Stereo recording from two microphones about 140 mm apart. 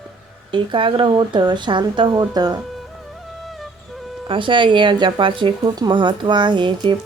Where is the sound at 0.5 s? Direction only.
35° right (ahead or behind).